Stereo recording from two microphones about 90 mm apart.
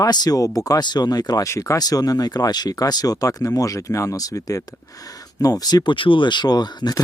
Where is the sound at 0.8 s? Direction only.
50° left (ahead or behind).